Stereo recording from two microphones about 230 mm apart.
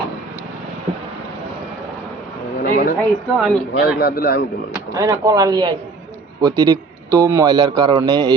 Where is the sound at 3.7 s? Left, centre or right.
Left.